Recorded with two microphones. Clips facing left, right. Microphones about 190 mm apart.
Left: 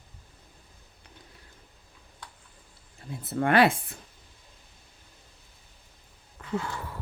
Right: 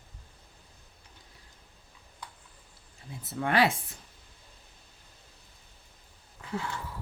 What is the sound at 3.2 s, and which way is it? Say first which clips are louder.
Speech: left 4 dB; 55° left (ahead or behind).